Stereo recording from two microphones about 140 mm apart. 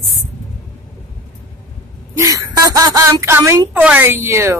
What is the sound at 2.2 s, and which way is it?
Speech, 25° right (ahead or behind).